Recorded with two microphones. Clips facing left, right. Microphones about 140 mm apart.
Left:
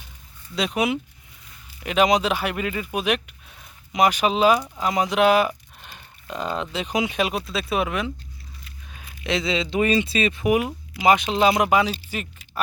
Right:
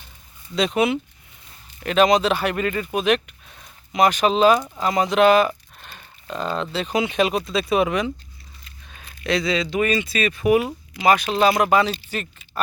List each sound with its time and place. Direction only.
0.5 s speech: 10° left (ahead or behind)
8.6 s a sound: 5° left (ahead or behind)
9.2 s speech: 20° left (ahead or behind)